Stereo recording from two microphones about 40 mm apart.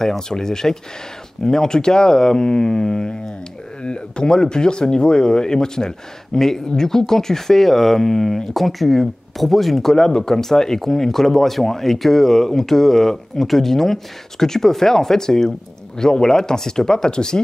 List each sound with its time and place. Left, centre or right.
0.0 s speech: centre
9.9 s speech: centre